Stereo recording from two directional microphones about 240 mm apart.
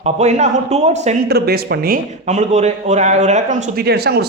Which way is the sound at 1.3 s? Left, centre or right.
Right.